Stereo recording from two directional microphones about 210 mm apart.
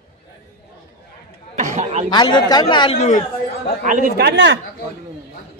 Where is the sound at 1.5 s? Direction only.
35° right (ahead or behind).